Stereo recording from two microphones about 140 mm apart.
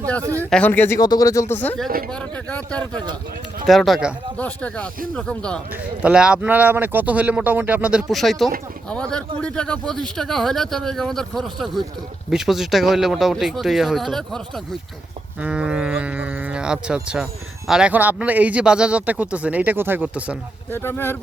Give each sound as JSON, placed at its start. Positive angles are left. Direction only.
{"t": 0.3, "sound": "speech", "side_deg": 10}
{"t": 0.9, "sound": "speech", "side_deg": 30}
{"t": 4.4, "sound": "speech", "side_deg": 10}
{"t": 5.7, "sound": "speech", "side_deg": -10}
{"t": 15.4, "sound": "speech", "side_deg": -10}
{"t": 20.7, "sound": "speech", "side_deg": 15}